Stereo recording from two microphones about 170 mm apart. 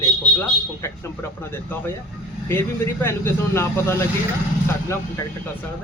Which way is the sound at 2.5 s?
15° left (ahead or behind).